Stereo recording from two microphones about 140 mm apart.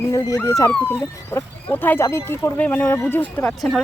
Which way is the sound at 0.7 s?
10° left (ahead or behind).